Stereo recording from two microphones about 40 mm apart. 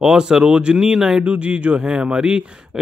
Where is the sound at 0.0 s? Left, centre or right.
Centre.